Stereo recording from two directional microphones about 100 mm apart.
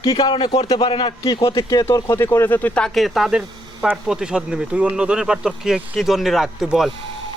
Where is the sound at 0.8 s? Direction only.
60° left (ahead or behind).